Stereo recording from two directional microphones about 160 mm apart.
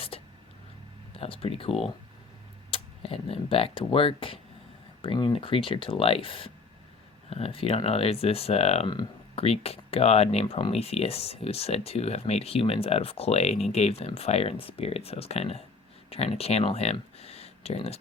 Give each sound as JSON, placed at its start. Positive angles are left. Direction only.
{"t": 0.1, "sound": "vehicle", "side_deg": 35}
{"t": 1.1, "sound": "speech", "side_deg": 35}